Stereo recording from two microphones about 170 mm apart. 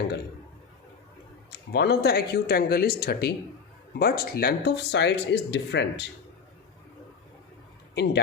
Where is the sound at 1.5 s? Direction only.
75° left (ahead or behind); by 5.8 s 90° left.